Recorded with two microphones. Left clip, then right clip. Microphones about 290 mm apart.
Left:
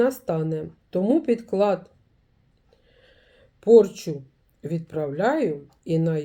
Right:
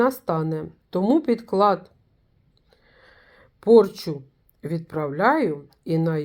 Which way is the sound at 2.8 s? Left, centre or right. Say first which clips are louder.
Right 4 dB; centre.